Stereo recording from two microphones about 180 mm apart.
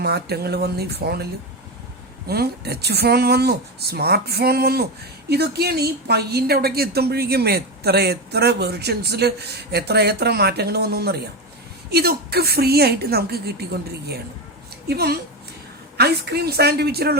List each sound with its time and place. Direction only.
0.0 s speech: 60° right (ahead or behind)
14.8 s speech: 60° right (ahead or behind)